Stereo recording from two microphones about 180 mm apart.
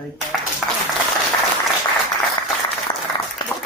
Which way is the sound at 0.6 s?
Centre (ahead or behind).